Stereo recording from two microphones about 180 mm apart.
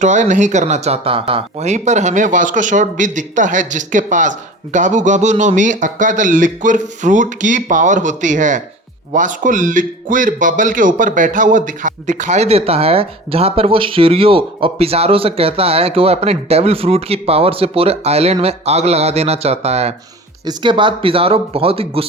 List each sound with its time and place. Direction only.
0.0 s speech: 45° right (ahead or behind)
20.4 s speech: 25° right (ahead or behind)